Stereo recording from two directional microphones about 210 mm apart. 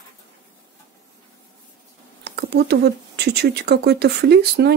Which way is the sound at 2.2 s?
50° right (ahead or behind).